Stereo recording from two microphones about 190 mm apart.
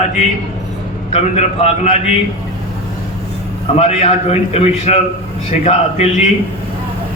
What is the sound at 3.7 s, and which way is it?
A man's voice, 35° left (ahead or behind).